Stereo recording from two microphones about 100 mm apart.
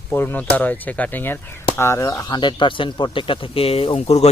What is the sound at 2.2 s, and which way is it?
Speech, 50° left (ahead or behind).